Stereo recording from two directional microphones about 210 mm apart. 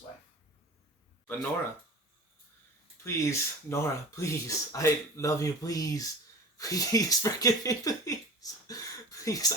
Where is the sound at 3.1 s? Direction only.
15° left (ahead or behind).